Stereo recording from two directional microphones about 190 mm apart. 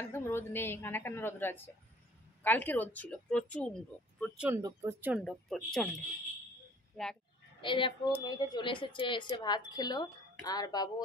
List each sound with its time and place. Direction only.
0.1 s a woman's voice: 10° left (ahead or behind)
4.2 s speech: 5° right (ahead or behind)
4.6 s speech: 15° right (ahead or behind)
5.1 s speech: centre (ahead or behind)
7.0 s speech: centre (ahead or behind)
7.6 s speech: 25° left (ahead or behind)